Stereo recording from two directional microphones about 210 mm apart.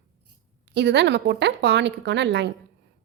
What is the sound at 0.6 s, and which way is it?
A woman's voice, 55° right (ahead or behind).